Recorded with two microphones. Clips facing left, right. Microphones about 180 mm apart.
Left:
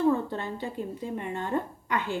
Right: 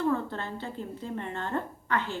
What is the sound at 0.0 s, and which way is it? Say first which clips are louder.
A woman's voice: left 3 dB; 15° left (ahead or behind).